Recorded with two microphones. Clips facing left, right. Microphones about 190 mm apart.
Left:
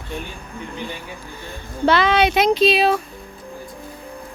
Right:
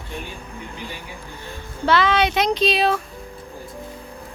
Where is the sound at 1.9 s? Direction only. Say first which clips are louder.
Left 2 dB; 15° left (ahead or behind).